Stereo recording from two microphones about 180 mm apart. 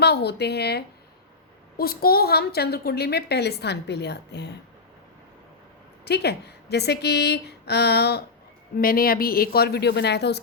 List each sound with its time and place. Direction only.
0.0 s a woman's voice: 65° left (ahead or behind)
6.1 s a woman's voice: 65° left (ahead or behind)
8.8 s a woman's voice: 55° left (ahead or behind)